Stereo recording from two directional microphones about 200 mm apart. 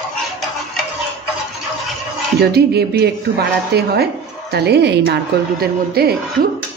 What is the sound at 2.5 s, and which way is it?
A woman's voice, 55° right (ahead or behind).